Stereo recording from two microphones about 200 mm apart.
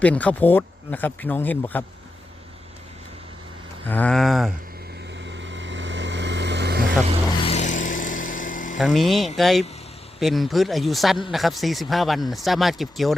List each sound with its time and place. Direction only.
0.0 s speech: 5° left (ahead or behind)
3.8 s speech: 5° left (ahead or behind)
5.1 s vehicle: 65° right (ahead or behind)
7.3 s vehicle: 30° left (ahead or behind)
8.8 s speech: centre (ahead or behind)